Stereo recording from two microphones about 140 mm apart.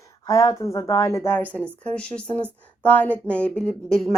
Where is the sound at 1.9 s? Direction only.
10° left (ahead or behind).